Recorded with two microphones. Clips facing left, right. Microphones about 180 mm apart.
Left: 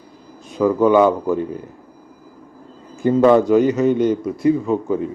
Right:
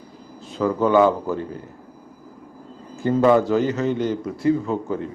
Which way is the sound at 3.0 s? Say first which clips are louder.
Left 4 dB; 20° left (ahead or behind).